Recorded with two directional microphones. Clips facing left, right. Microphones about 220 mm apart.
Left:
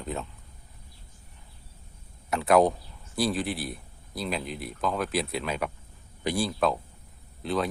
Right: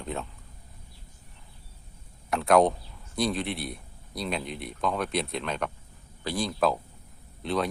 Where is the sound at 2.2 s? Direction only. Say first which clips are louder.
Even; centre (ahead or behind).